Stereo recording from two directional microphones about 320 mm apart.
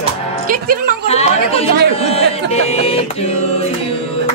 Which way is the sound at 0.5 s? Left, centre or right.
Right.